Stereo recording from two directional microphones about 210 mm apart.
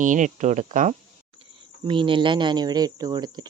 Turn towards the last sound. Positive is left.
turn(degrees=-20)  # may be behind; listen again after turning